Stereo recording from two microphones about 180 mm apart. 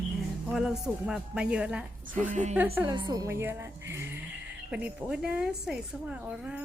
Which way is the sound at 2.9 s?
20° right (ahead or behind).